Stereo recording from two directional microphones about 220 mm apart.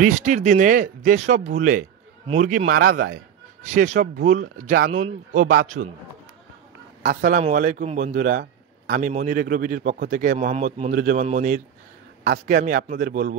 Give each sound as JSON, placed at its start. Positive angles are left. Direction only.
{"t": 0.0, "sound": "a man's voice", "side_deg": -35}
{"t": 7.0, "sound": "a man's voice", "side_deg": -35}